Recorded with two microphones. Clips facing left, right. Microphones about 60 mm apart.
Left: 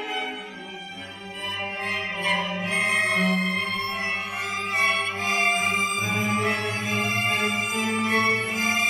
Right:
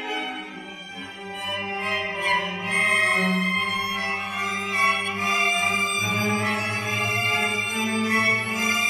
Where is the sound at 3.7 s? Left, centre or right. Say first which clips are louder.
Right 1 dB; centre.